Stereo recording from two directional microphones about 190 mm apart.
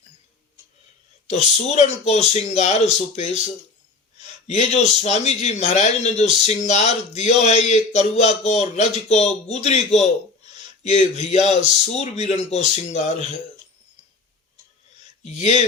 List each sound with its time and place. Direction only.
1.3 s a man's voice: 35° left (ahead or behind)
15.2 s speech: 35° left (ahead or behind)